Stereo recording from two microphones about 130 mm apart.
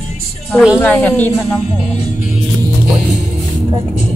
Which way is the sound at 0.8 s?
15° left (ahead or behind).